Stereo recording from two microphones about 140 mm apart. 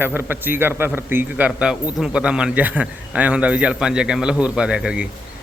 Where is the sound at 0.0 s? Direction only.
15° right (ahead or behind).